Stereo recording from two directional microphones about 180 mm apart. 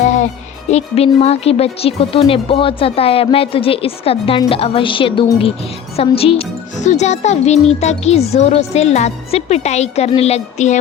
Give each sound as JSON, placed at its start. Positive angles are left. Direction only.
{"t": 0.7, "sound": "speech", "side_deg": 35}